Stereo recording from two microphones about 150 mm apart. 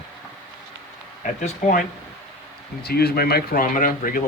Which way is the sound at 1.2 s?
55° left (ahead or behind).